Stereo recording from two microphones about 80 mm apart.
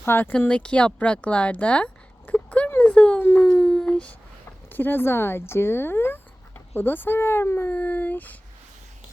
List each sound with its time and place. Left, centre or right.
0.0 s speech: left
0.3 s speech: centre
3.4 s a sound: centre
4.7 s speech: left